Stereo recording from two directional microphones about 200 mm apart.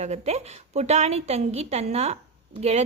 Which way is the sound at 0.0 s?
35° right (ahead or behind).